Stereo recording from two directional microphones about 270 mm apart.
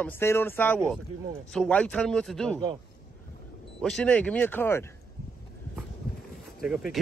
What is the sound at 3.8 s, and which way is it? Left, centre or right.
Speech, centre.